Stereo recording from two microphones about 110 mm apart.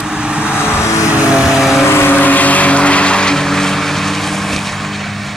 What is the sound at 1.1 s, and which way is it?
Vehicle, 10° right (ahead or behind).